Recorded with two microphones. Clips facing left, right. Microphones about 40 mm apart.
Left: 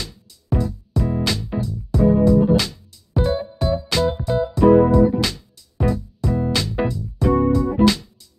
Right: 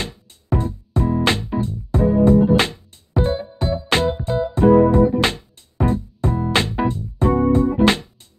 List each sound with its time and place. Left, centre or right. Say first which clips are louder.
0.0 s music: right 5 dB; right